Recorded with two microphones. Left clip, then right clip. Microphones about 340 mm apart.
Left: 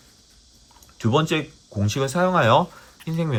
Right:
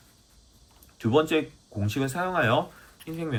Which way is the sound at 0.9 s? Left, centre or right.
Centre.